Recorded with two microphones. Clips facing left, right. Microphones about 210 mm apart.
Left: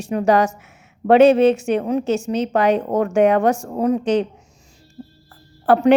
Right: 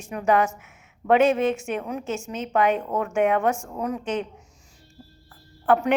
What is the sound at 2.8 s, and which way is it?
A woman's voice, 40° left (ahead or behind).